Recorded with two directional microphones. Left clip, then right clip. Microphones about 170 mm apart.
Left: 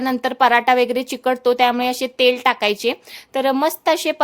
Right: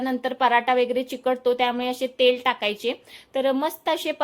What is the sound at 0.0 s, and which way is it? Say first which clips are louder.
A woman's voice: left 6 dB; 35° left (ahead or behind).